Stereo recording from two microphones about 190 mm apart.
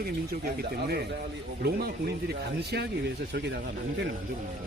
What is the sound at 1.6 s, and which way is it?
Speech, 55° right (ahead or behind).